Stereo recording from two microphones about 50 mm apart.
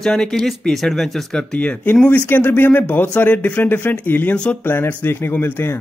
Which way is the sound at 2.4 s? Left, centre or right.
Left.